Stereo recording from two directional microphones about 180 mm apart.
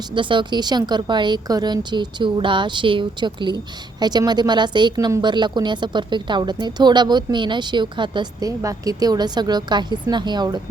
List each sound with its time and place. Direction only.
0.1 s speech: 25° right (ahead or behind)